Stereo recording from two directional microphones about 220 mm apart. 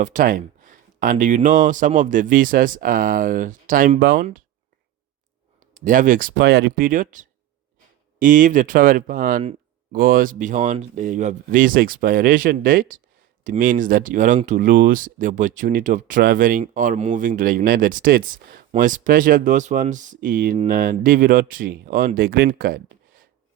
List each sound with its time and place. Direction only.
0.0 s speech: 35° right (ahead or behind)
5.7 s speech: 35° right (ahead or behind)